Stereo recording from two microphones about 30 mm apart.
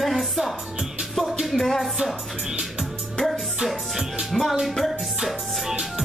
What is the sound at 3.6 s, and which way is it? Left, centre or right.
Music, centre.